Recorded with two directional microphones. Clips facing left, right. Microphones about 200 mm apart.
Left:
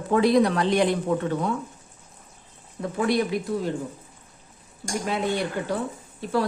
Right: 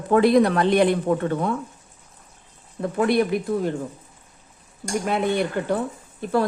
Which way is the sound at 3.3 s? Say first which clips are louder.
Right 3 dB; 55° right (ahead or behind).